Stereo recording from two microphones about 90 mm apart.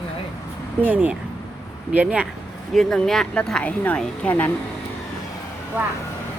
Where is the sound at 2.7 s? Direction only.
5° left (ahead or behind).